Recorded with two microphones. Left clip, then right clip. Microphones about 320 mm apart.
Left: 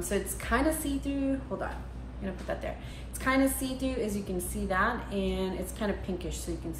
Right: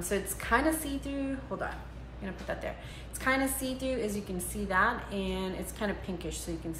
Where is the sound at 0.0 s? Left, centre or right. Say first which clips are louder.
Left 1 dB; centre.